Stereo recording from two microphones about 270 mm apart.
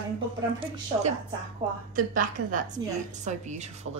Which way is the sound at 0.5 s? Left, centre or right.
Centre.